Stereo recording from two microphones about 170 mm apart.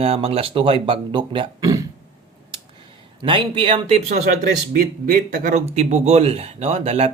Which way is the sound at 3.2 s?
30° right (ahead or behind).